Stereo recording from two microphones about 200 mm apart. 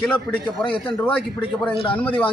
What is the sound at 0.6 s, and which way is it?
Speech, 25° left (ahead or behind).